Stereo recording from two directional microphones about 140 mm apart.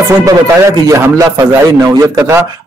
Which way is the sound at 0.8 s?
20° right (ahead or behind).